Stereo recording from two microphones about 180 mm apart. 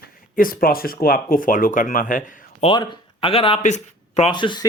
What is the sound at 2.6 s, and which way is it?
Speech, 25° left (ahead or behind).